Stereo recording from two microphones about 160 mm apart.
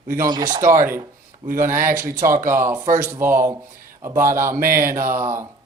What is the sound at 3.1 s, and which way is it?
Speech, 15° right (ahead or behind).